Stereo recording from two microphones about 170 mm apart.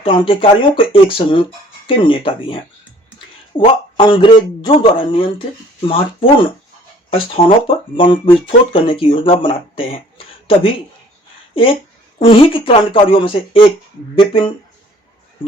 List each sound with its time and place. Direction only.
0.0 s speech: 30° left (ahead or behind)
7.9 s speech: 30° left (ahead or behind)